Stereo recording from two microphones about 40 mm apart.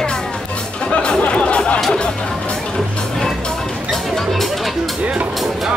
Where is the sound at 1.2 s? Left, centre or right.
Left.